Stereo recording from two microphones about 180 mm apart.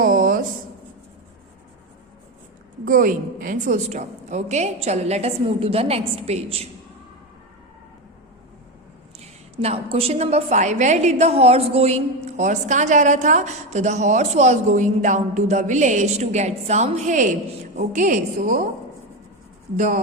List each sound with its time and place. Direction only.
0.0 s a sound: 50° right (ahead or behind)
2.8 s a woman's voice: 50° right (ahead or behind)
9.1 s a woman's voice: 35° right (ahead or behind)
19.7 s a woman's voice: 45° right (ahead or behind)